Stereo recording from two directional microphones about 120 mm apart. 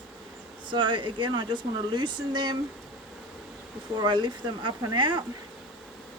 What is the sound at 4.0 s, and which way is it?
Speech, 40° right (ahead or behind).